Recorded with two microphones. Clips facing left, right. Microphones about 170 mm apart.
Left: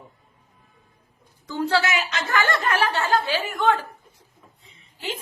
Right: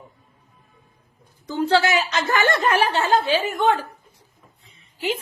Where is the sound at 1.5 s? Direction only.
20° right (ahead or behind).